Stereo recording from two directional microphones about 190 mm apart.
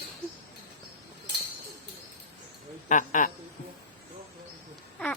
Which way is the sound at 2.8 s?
45° left (ahead or behind).